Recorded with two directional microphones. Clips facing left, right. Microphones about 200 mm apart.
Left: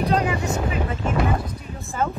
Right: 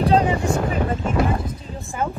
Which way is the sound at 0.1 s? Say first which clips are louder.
Right 4 dB; 35° right (ahead or behind).